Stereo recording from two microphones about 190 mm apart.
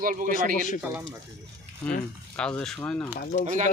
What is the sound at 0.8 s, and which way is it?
Speech, 10° right (ahead or behind).